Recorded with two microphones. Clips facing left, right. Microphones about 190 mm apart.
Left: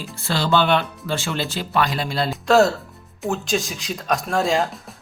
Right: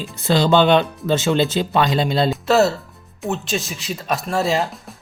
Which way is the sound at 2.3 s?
5° right (ahead or behind).